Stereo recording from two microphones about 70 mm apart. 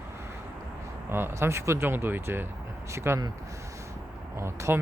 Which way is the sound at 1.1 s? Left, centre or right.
Right.